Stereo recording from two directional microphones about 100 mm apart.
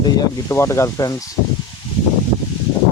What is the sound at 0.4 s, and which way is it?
Speech, 30° left (ahead or behind).